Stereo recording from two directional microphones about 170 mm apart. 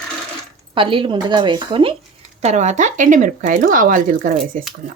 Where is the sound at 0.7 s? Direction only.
30° right (ahead or behind).